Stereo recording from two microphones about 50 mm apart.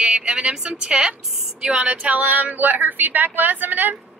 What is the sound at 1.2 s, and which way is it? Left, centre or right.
Speech, centre.